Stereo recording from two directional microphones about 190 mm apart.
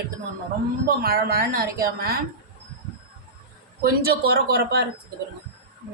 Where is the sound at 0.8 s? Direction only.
50° right (ahead or behind).